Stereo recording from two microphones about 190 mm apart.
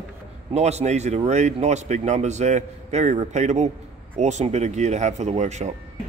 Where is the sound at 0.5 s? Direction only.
35° right (ahead or behind).